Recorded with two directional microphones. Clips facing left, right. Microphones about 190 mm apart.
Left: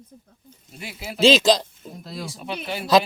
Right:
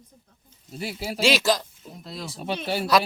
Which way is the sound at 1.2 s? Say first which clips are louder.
Left 6 dB; 20° left (ahead or behind).